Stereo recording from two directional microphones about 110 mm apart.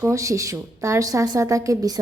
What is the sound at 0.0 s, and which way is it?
A woman's voice, 25° right (ahead or behind).